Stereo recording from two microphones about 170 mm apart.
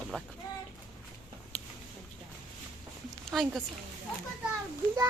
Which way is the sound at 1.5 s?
10° left (ahead or behind).